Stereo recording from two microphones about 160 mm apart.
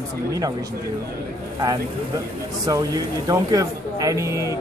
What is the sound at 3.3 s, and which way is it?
A man's voice, 20° right (ahead or behind).